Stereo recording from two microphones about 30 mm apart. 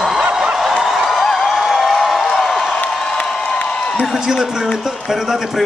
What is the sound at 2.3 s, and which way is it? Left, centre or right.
Crowd, centre.